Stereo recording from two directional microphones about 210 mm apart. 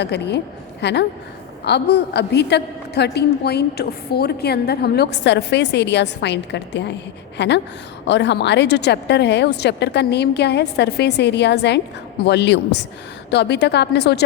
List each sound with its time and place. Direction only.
0.0 s a woman's voice: 55° left (ahead or behind)